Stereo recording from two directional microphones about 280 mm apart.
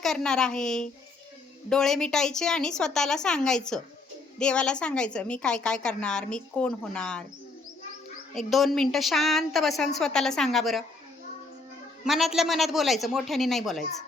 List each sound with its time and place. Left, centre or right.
0.0 s a woman's voice: centre
8.4 s a woman's voice: centre
12.0 s a woman's voice: centre